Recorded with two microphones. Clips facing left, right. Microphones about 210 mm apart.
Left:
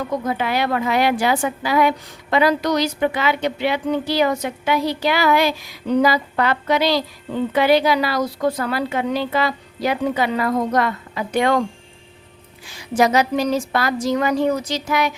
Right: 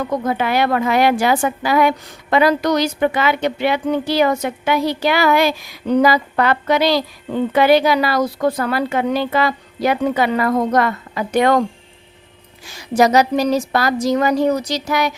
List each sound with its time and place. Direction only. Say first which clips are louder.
0.3 s a woman's voice: right 4 dB; 55° right (ahead or behind)
12.6 s a woman's voice: right 3 dB; 40° right (ahead or behind)